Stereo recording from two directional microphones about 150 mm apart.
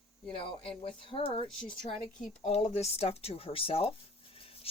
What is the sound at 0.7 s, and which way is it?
Speech, 35° left (ahead or behind).